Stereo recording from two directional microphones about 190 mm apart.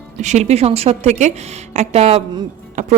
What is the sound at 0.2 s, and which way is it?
A woman's voice, 35° right (ahead or behind).